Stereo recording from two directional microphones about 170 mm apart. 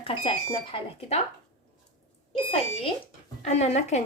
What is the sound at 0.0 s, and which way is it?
A woman's voice, 30° left (ahead or behind).